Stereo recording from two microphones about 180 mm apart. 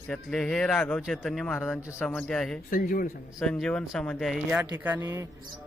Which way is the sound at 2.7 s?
50° left (ahead or behind).